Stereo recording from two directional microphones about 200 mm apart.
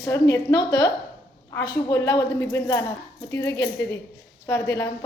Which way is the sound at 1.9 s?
20° left (ahead or behind).